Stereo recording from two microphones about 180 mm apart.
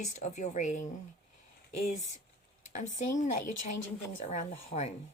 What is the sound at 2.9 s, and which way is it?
A woman's voice, 45° left (ahead or behind).